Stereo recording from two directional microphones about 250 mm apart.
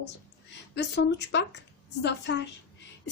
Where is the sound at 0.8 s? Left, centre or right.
Left.